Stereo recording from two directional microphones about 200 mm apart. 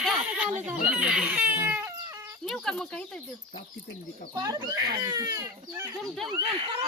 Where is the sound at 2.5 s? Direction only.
5° left (ahead or behind).